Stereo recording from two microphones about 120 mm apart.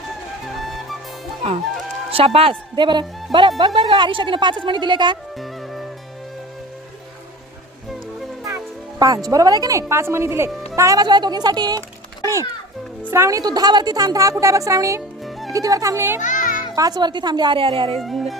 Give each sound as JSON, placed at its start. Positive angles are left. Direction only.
{"t": 0.4, "sound": "music", "side_deg": 0}
{"t": 2.1, "sound": "a woman's voice", "side_deg": -50}
{"t": 8.4, "sound": "a woman's voice", "side_deg": -25}
{"t": 12.2, "sound": "music", "side_deg": -25}
{"t": 13.0, "sound": "a woman's voice", "side_deg": -20}
{"t": 15.2, "sound": "music", "side_deg": 0}
{"t": 15.5, "sound": "a woman's voice", "side_deg": -30}
{"t": 16.2, "sound": "music", "side_deg": 90}
{"t": 16.7, "sound": "a woman's voice", "side_deg": -30}
{"t": 18.0, "sound": "speech", "side_deg": 0}